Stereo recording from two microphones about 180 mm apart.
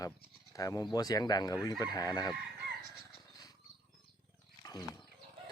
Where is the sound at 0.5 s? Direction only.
20° left (ahead or behind).